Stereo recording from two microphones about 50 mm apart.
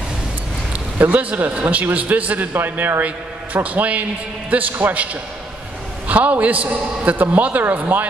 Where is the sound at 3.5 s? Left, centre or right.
Right.